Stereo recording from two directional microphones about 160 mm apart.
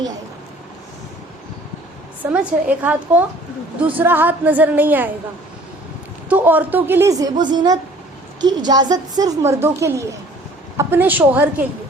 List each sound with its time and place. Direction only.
2.5 s a woman's voice: 10° right (ahead or behind)
6.2 s a woman's voice: 10° right (ahead or behind)